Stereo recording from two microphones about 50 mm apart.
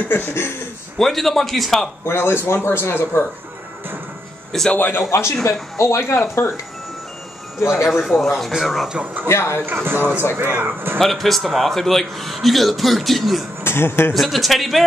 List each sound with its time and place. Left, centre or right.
0.1 s speech: left
0.9 s a man's voice: centre
2.0 s speech: left
4.5 s a man's voice: centre
4.7 s speech: left
5.1 s speech: left
7.9 s a man's voice: centre
9.0 s speech: right
9.3 s speech: left
9.7 s speech: right
11.0 s a man's voice: centre
13.7 s speech: left
14.1 s a man's voice: centre